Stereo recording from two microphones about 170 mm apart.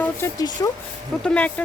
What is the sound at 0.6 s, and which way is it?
Speech, 20° left (ahead or behind).